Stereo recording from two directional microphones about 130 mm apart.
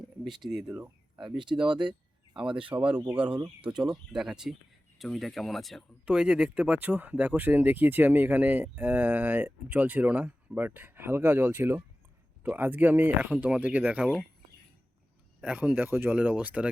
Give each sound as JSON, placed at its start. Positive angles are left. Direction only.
{"t": 0.3, "sound": "speech", "side_deg": 0}
{"t": 1.2, "sound": "speech", "side_deg": -35}
{"t": 2.7, "sound": "speech", "side_deg": -10}
{"t": 15.4, "sound": "speech", "side_deg": -10}